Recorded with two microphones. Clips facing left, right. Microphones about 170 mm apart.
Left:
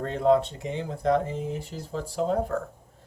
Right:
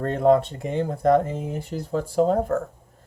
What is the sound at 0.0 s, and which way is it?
Speech, 50° right (ahead or behind).